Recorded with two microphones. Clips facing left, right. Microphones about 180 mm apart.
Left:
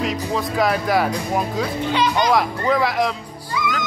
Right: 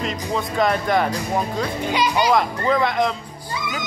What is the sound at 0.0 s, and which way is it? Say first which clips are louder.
Speech: left 2 dB; centre (ahead or behind).